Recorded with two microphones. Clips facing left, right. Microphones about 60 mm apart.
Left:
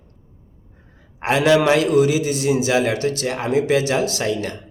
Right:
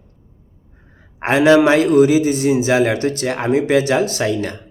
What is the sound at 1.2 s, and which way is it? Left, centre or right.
A man's voice, right.